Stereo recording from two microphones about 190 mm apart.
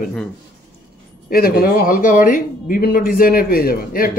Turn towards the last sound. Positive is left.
turn(degrees=50)  # may be behind; listen again after turning